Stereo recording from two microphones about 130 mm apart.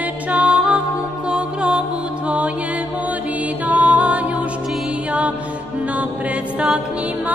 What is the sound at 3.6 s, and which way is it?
Music, 10° right (ahead or behind).